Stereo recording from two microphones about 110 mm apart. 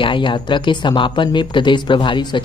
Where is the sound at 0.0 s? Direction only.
50° left (ahead or behind).